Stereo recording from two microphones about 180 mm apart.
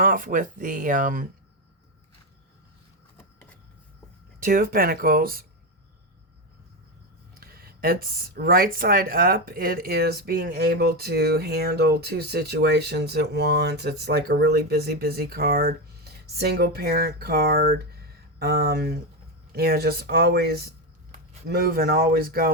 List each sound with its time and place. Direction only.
0.0 s speech: 50° right (ahead or behind)
3.2 s printer: 10° left (ahead or behind)
4.4 s speech: 55° right (ahead or behind)
7.3 s speech: 55° right (ahead or behind)